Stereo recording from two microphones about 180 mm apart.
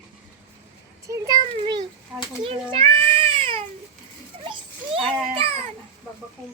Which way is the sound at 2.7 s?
30° right (ahead or behind).